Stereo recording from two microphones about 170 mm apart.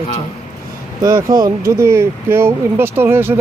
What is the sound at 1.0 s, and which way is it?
Speech, 20° right (ahead or behind).